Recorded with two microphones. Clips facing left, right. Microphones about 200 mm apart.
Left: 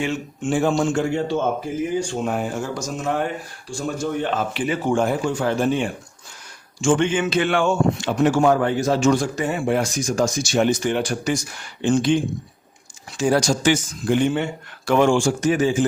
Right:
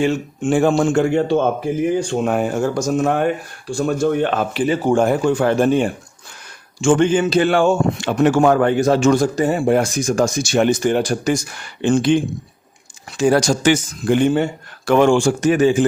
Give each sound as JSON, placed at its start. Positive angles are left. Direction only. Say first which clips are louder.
{"t": 0.0, "sound": "speech", "louder": "right 6 dB", "side_deg": -40}
{"t": 0.8, "sound": "speech", "louder": "right 5 dB", "side_deg": -55}
{"t": 4.5, "sound": "speech", "louder": "right 5 dB", "side_deg": -35}
{"t": 6.9, "sound": "speech", "louder": "right 5 dB", "side_deg": -40}
{"t": 8.0, "sound": "speech", "louder": "right 4 dB", "side_deg": -60}
{"t": 9.1, "sound": "speech", "louder": "right 6 dB", "side_deg": -40}
{"t": 11.8, "sound": "speech", "louder": "right 3 dB", "side_deg": -65}
{"t": 14.9, "sound": "speech", "louder": "right 3 dB", "side_deg": -60}